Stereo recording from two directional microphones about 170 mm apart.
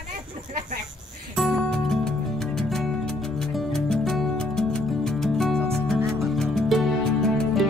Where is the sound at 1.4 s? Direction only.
Centre (ahead or behind).